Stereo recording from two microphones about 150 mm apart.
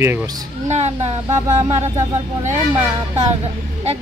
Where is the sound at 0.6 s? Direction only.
45° right (ahead or behind).